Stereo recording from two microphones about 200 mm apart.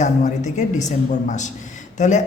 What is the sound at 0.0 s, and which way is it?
A man's voice, 35° left (ahead or behind).